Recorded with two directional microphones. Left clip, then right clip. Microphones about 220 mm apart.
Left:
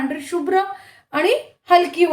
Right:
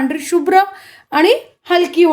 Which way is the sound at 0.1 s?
50° right (ahead or behind).